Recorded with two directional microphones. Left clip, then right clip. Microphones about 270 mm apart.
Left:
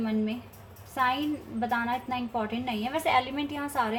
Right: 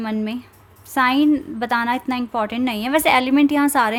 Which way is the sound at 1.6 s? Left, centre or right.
Right.